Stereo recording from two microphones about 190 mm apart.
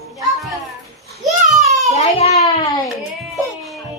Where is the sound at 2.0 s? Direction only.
35° left (ahead or behind).